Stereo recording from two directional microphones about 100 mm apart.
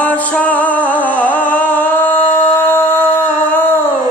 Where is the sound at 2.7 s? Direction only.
20° left (ahead or behind).